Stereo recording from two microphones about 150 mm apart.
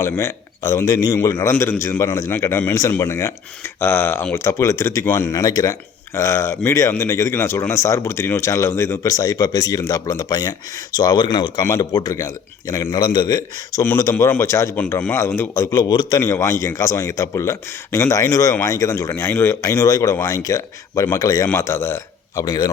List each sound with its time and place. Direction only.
0.0 s a man's voice: 20° left (ahead or behind)